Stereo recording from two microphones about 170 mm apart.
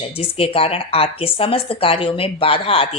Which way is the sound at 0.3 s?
35° left (ahead or behind).